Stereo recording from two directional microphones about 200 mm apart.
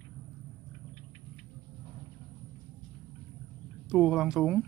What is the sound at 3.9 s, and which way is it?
Speech, 5° right (ahead or behind).